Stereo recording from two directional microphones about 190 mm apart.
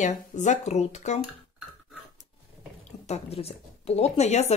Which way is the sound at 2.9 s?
35° left (ahead or behind).